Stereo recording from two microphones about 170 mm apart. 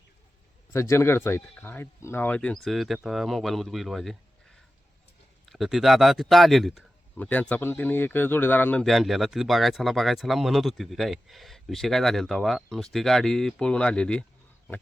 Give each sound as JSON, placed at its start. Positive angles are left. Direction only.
{"t": 0.7, "sound": "speech", "side_deg": 15}
{"t": 5.5, "sound": "speech", "side_deg": 0}
{"t": 8.8, "sound": "speech", "side_deg": 0}